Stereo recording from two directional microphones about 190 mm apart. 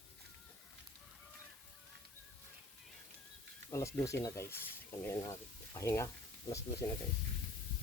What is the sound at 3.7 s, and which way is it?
Speech, 15° left (ahead or behind).